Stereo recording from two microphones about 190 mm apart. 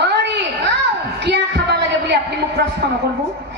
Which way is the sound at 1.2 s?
60° right (ahead or behind).